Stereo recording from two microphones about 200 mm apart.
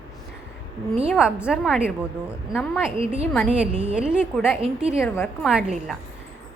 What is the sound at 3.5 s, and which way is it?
A woman's voice, 5° right (ahead or behind).